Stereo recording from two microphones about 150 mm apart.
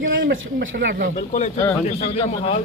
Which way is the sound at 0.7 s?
90° right.